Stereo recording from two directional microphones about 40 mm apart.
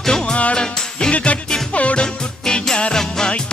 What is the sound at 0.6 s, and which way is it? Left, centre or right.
Music, centre.